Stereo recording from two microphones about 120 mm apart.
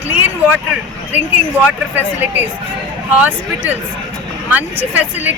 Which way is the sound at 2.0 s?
15° right (ahead or behind).